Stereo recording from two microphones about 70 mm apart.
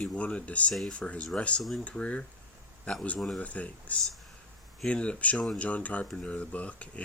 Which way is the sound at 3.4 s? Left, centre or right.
Centre.